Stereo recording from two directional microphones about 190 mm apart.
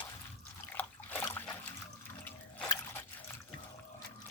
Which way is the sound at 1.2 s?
20° left (ahead or behind).